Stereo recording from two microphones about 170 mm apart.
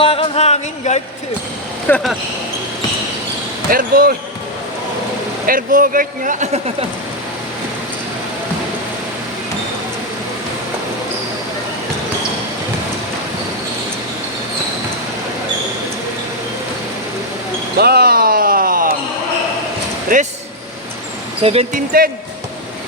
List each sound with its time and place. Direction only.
0.0 s a sound: 30° left (ahead or behind)
1.9 s speech: 10° left (ahead or behind)
3.7 s speech: 60° right (ahead or behind)
5.5 s speech: 55° right (ahead or behind)
17.7 s a sound: 70° right (ahead or behind)
20.1 s vehicle: 55° right (ahead or behind)
21.4 s speech: 35° right (ahead or behind)
21.7 s speech: 55° right (ahead or behind)